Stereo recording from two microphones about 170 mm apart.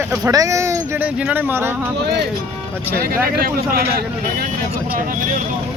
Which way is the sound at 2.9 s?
65° right (ahead or behind).